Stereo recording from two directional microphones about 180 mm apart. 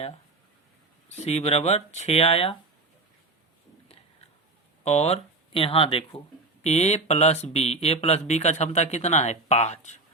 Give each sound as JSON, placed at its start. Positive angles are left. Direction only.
{"t": 1.1, "sound": "speech", "side_deg": 40}
{"t": 4.8, "sound": "speech", "side_deg": 40}